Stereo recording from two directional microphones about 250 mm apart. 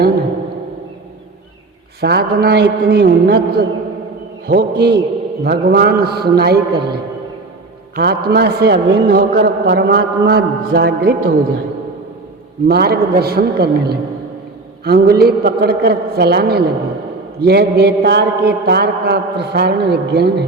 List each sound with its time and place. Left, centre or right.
2.0 s a man's voice: right
12.6 s a man's voice: right